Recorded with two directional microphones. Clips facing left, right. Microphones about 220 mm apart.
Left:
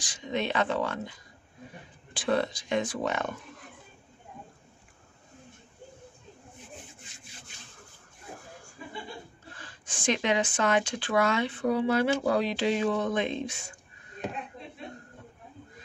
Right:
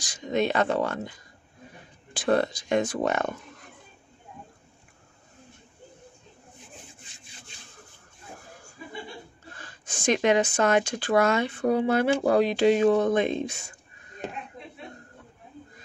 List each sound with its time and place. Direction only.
0.0 s speech: 40° right (ahead or behind)
2.1 s speech: 45° right (ahead or behind)
9.6 s speech: 45° right (ahead or behind)